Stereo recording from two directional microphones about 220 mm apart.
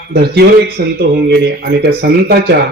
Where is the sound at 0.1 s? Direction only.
50° right (ahead or behind).